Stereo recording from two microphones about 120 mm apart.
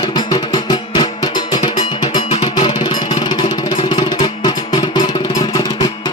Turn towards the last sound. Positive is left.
turn(degrees=35)  # may be behind; listen again after turning